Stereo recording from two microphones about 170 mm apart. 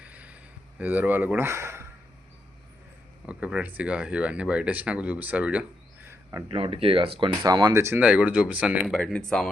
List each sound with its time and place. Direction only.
0.0 s a sound: 10° right (ahead or behind)
0.8 s speech: 10° right (ahead or behind)
3.2 s speech: 10° right (ahead or behind)
6.5 s speech: 35° right (ahead or behind)
7.4 s speech: 20° right (ahead or behind); by 9.5 s 5° left (ahead or behind)